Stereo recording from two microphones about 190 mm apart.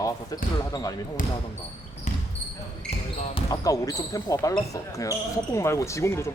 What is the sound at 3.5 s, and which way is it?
Speech, 20° left (ahead or behind).